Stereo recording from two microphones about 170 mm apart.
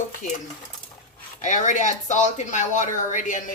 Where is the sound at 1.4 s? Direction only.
45° left (ahead or behind).